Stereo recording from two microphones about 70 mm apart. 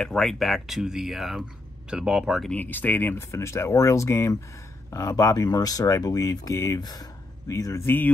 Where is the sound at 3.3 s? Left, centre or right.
Left.